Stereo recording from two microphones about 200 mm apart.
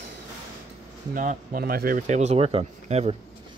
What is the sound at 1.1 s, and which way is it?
Speech, 40° right (ahead or behind).